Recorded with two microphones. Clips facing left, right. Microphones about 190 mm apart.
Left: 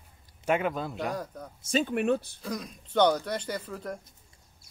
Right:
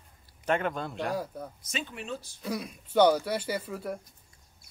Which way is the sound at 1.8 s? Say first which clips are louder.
Left 12 dB; 60° left (ahead or behind).